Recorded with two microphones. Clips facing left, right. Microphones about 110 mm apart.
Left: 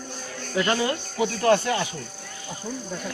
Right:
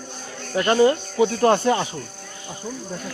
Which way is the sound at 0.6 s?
35° right (ahead or behind).